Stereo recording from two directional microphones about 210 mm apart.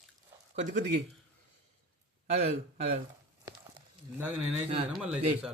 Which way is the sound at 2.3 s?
30° right (ahead or behind).